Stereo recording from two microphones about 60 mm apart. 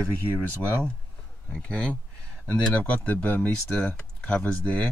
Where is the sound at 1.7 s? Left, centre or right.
Centre.